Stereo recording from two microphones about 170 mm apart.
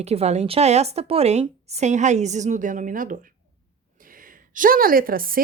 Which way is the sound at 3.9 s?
55° right (ahead or behind).